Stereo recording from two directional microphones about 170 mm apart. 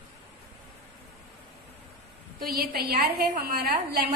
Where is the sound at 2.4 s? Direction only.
60° right (ahead or behind).